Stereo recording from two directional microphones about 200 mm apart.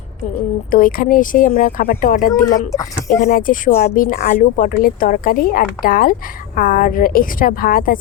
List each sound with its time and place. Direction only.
0.7 s a woman's voice: 45° left (ahead or behind)
2.4 s speech: 15° left (ahead or behind)
3.2 s a woman's voice: 45° left (ahead or behind)